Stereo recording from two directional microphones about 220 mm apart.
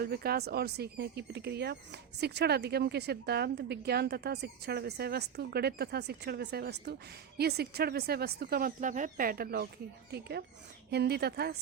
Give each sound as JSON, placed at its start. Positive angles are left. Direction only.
{"t": 0.0, "sound": "speech", "side_deg": -45}